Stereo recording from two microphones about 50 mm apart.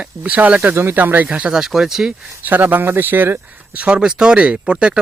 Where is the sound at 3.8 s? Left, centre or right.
Right.